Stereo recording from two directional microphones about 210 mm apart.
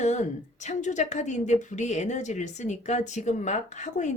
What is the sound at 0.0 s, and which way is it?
A woman's voice, 35° left (ahead or behind).